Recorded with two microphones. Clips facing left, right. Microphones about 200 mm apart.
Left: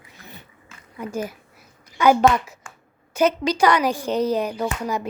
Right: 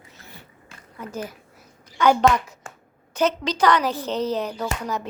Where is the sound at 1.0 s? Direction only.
10° left (ahead or behind).